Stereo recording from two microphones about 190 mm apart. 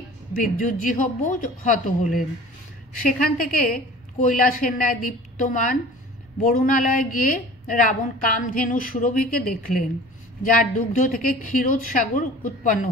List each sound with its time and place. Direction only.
0.4 s a woman's voice: 45° left (ahead or behind)